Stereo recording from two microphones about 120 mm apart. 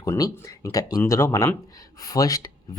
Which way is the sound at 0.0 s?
25° left (ahead or behind).